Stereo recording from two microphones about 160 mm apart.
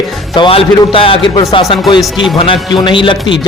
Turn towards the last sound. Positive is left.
turn(degrees=30)  # may be behind; listen again after turning